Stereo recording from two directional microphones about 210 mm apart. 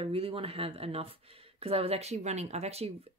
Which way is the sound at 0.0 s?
25° right (ahead or behind).